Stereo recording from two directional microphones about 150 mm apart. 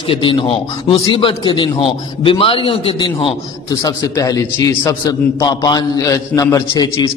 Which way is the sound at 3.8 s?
25° left (ahead or behind).